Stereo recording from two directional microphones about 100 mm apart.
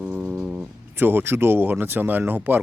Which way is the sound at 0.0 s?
20° right (ahead or behind).